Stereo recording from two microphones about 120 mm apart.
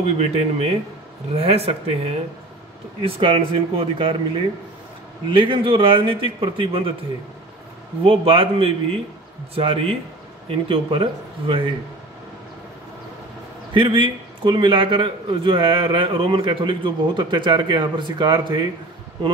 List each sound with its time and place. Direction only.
0.0 s speech: 60° right (ahead or behind)
3.0 s a man's voice: 45° right (ahead or behind)
5.3 s a man's voice: 45° right (ahead or behind)
8.0 s a man's voice: 50° right (ahead or behind)
13.7 s a man's voice: 45° right (ahead or behind)